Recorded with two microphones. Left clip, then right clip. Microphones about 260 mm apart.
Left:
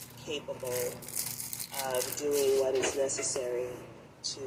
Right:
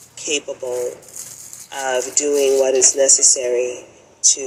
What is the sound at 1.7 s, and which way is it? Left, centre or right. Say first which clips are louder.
Speech: right 12 dB; right.